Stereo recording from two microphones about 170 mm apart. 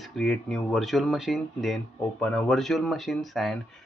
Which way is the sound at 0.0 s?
Centre (ahead or behind).